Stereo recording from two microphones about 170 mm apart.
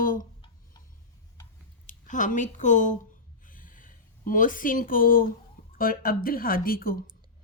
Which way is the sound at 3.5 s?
55° left (ahead or behind).